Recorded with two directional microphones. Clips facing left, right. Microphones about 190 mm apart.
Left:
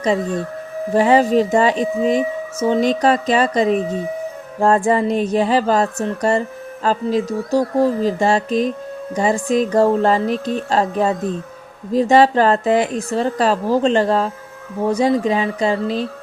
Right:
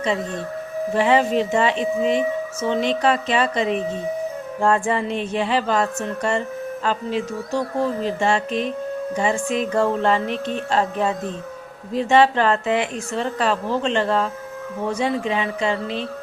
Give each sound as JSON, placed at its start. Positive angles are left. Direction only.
{"t": 0.9, "sound": "speech", "side_deg": 40}